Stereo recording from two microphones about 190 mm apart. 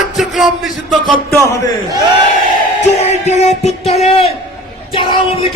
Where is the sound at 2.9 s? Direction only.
35° left (ahead or behind).